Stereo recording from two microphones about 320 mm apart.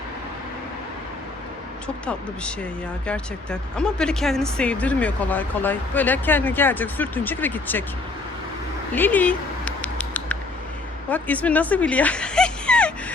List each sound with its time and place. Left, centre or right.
2.0 s speech: centre
9.0 s a sound: centre
11.1 s dog: centre